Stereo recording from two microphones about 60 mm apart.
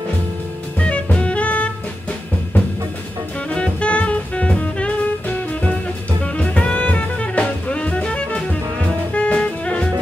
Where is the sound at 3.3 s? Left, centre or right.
Centre.